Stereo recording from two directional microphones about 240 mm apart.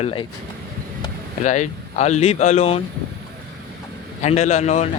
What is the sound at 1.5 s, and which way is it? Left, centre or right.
Speech, left.